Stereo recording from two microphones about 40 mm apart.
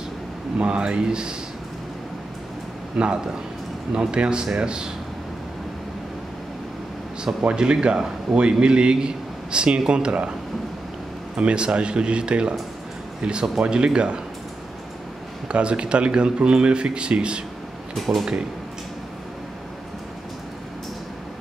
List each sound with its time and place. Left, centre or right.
0.6 s a man's voice: right
3.0 s a man's voice: right
7.5 s a man's voice: right
11.3 s a man's voice: right
15.4 s a man's voice: right
17.9 s speech: centre